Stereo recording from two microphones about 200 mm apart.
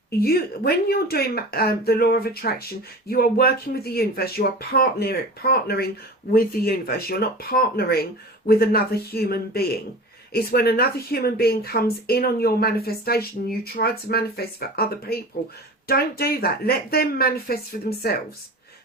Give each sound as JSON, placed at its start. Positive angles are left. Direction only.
{"t": 0.2, "sound": "speech", "side_deg": 50}